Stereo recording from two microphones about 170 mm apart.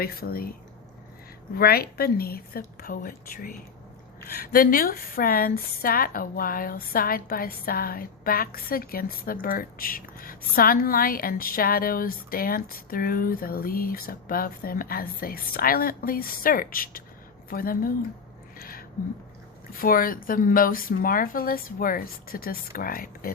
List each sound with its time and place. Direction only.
0.0 s a woman's voice: 60° left (ahead or behind)
1.5 s a woman's voice: 60° left (ahead or behind)
18.5 s a sound: 60° left (ahead or behind)
19.7 s a woman's voice: 55° left (ahead or behind)